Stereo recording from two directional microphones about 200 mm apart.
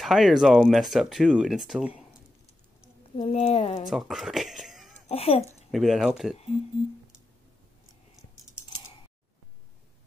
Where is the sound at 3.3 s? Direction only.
30° left (ahead or behind).